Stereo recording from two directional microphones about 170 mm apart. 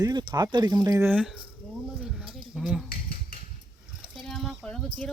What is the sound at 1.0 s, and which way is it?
Speech, 5° right (ahead or behind).